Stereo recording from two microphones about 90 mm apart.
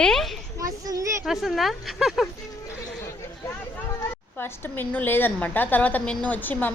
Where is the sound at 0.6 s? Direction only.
40° right (ahead or behind).